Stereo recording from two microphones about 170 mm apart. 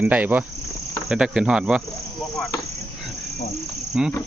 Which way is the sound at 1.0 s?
5° right (ahead or behind).